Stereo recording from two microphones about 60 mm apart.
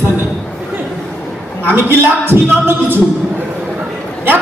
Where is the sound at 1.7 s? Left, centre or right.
Right.